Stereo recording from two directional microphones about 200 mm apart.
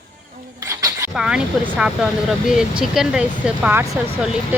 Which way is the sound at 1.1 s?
5° right (ahead or behind).